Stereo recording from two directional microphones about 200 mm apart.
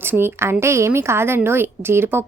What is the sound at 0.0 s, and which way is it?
A woman's voice, 10° right (ahead or behind).